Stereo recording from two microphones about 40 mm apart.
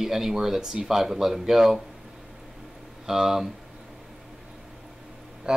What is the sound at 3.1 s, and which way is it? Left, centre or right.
Speech, centre.